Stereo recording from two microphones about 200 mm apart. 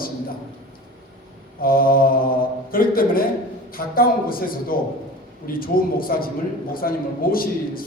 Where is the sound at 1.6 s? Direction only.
45° left (ahead or behind).